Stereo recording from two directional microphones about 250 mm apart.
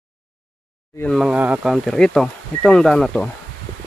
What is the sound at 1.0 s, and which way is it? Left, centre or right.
Speech, centre.